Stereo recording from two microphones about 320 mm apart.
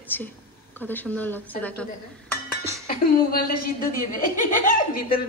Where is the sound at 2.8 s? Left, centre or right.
Left.